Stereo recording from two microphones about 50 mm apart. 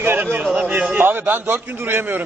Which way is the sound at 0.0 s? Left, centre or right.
Right.